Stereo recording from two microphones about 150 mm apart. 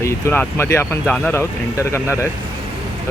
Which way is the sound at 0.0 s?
15° left (ahead or behind).